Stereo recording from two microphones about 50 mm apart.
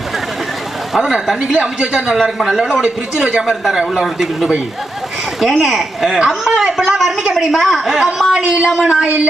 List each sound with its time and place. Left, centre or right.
0.9 s a man's voice: centre
2.1 s speech: centre
2.8 s a man's voice: centre
4.0 s a woman's voice: centre
8.8 s a sound: centre